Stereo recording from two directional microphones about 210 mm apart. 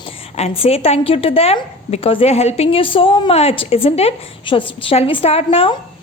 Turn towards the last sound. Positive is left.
turn(degrees=30)  # may be behind; listen again after turning